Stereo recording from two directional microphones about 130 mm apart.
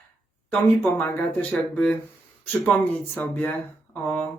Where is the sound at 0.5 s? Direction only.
Centre (ahead or behind).